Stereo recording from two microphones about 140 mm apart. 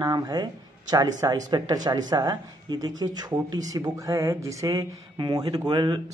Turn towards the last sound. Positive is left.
turn(degrees=-35)  # may be behind; listen again after turning